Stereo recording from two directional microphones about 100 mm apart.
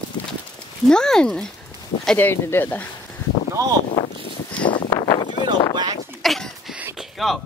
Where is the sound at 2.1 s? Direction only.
20° left (ahead or behind).